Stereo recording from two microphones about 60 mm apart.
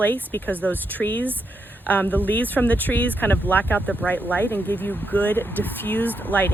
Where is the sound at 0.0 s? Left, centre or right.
Left.